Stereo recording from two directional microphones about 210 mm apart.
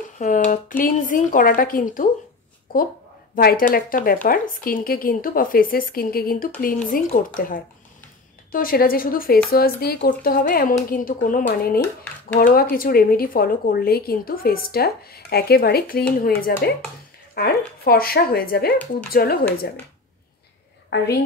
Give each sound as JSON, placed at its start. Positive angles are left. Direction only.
{"t": 0.2, "sound": "speech", "side_deg": 35}
{"t": 3.3, "sound": "speech", "side_deg": 45}